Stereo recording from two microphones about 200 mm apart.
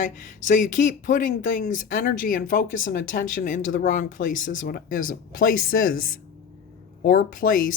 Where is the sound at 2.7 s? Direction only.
70° left (ahead or behind).